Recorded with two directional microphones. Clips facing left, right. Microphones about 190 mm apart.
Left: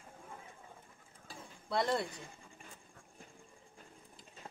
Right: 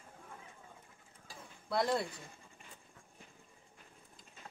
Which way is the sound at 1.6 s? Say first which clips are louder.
Even; centre (ahead or behind).